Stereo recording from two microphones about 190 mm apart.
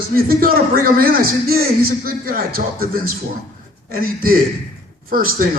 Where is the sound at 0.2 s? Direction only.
50° right (ahead or behind).